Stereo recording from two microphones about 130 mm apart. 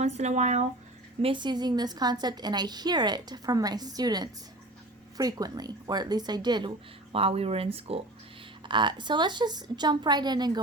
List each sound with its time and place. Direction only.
0.0 s speech: 60° right (ahead or behind)
1.2 s a woman's voice: 40° right (ahead or behind)
8.6 s a woman's voice: 35° right (ahead or behind)